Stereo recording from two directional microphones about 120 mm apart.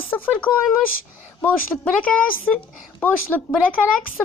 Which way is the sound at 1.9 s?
10° left (ahead or behind).